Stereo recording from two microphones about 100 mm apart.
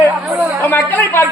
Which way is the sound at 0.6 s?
20° left (ahead or behind).